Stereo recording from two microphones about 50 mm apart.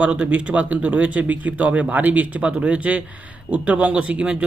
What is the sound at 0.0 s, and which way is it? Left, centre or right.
Speech, right.